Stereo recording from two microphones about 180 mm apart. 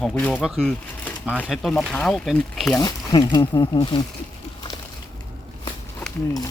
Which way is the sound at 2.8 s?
20° left (ahead or behind).